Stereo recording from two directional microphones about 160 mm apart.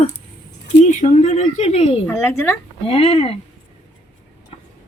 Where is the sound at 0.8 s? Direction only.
45° left (ahead or behind).